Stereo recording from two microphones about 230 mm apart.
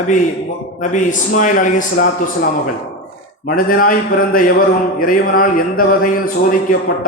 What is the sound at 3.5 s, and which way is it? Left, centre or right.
A man's voice, left.